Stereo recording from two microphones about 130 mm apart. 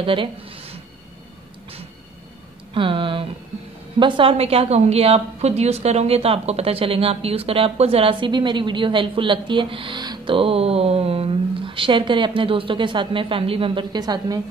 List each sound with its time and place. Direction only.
0.0 s speech: 40° right (ahead or behind)
2.7 s a woman's voice: 40° right (ahead or behind)